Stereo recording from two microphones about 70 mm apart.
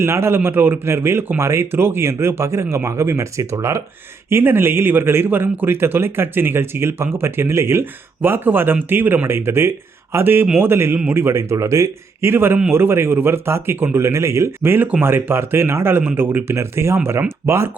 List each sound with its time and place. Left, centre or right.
0.0 s a man's voice: right
11.3 s speech: right
12.3 s a man's voice: right